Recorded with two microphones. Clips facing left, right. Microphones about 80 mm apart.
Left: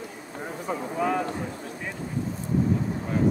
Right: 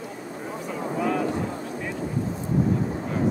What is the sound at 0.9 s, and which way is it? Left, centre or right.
Vehicle, centre.